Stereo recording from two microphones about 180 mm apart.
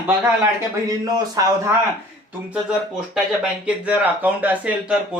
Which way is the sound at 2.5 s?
5° right (ahead or behind).